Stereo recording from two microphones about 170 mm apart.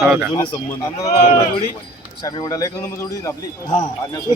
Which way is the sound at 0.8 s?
20° left (ahead or behind).